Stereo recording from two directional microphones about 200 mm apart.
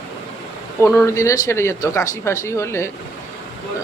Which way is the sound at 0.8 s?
15° left (ahead or behind).